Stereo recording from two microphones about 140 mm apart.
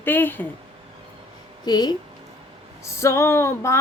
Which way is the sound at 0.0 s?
15° left (ahead or behind).